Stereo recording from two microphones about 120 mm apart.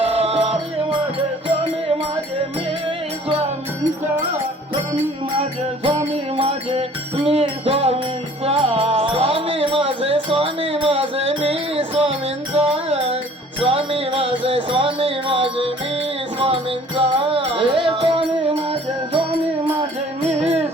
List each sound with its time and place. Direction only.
0.0 s music: 55° right (ahead or behind)
3.2 s music: 50° right (ahead or behind)
5.4 s music: 55° right (ahead or behind)
20.3 s music: 60° right (ahead or behind)